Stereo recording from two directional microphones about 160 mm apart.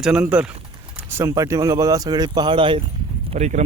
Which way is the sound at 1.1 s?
20° right (ahead or behind).